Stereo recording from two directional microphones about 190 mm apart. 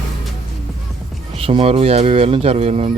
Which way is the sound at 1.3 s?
30° right (ahead or behind).